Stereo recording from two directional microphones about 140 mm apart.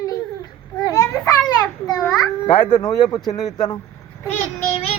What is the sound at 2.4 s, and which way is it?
Speech, 45° left (ahead or behind).